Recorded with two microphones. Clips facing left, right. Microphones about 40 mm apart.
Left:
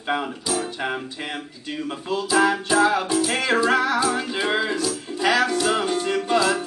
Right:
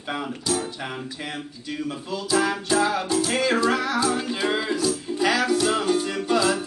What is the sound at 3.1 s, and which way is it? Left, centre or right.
Music, centre.